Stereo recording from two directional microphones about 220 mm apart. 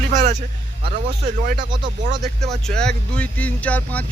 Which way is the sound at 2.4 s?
Centre (ahead or behind).